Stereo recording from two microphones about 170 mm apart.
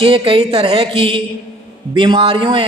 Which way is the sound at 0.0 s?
30° right (ahead or behind).